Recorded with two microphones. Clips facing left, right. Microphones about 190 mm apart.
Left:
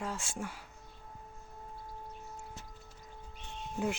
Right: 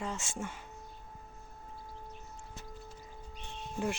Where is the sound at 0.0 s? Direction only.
Centre (ahead or behind).